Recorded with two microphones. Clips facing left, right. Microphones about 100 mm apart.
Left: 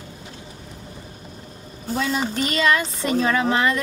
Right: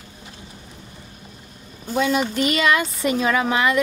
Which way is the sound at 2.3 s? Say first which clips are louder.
Right 3 dB; 35° left (ahead or behind).